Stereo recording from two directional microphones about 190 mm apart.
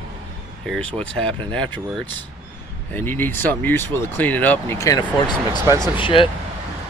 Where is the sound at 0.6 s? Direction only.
5° left (ahead or behind); by 6.3 s 30° left (ahead or behind).